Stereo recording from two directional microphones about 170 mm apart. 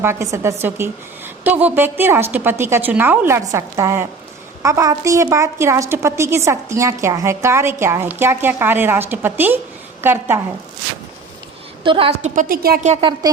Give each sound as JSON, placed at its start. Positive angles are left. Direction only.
{"t": 0.0, "sound": "a woman's voice", "side_deg": -15}
{"t": 11.8, "sound": "a woman's voice", "side_deg": -30}
{"t": 12.3, "sound": "a woman's voice", "side_deg": -55}
{"t": 12.8, "sound": "a woman's voice", "side_deg": -40}